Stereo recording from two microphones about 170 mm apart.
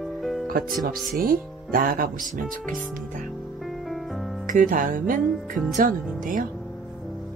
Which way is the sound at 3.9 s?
Centre (ahead or behind).